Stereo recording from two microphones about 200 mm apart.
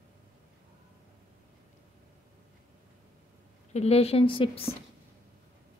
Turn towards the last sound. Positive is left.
turn(degrees=25)  # may be behind; listen again after turning